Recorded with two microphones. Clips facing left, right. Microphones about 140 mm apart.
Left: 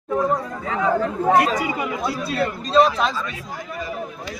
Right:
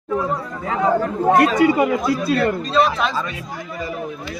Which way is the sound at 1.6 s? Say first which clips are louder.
Right 10 dB; 65° right (ahead or behind).